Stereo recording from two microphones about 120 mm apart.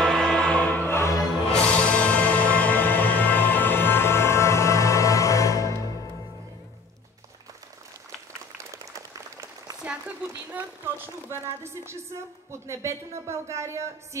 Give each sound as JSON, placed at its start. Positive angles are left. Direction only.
{"t": 0.0, "sound": "music", "side_deg": 5}
{"t": 1.5, "sound": "music", "side_deg": 10}
{"t": 9.8, "sound": "speech", "side_deg": -10}